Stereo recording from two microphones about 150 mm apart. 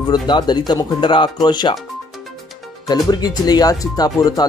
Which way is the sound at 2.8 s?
25° left (ahead or behind).